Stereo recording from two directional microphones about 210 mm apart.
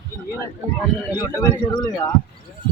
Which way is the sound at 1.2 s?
15° left (ahead or behind).